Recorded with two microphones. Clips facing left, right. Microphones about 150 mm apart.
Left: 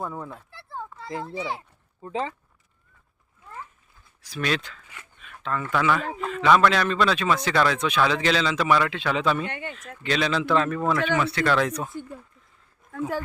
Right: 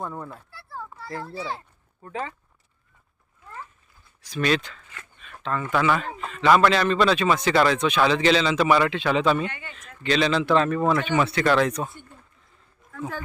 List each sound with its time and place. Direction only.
0.0 s a man's voice: 5° left (ahead or behind)
0.5 s a sound: 20° left (ahead or behind)
4.2 s a man's voice: 5° left (ahead or behind)
4.9 s a sound: 10° left (ahead or behind)
5.7 s a man's voice: 5° right (ahead or behind)
9.5 s speech: 60° left (ahead or behind)
9.7 s a man's voice: 5° left (ahead or behind)
11.2 s speech: 20° right (ahead or behind)
11.4 s a man's voice: centre (ahead or behind)